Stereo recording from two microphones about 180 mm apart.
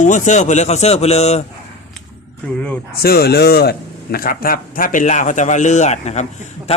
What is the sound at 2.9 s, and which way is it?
Speech, 60° left (ahead or behind).